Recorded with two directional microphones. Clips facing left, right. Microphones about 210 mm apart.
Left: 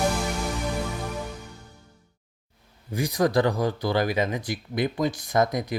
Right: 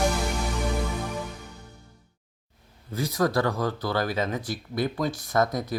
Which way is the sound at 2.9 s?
15° left (ahead or behind).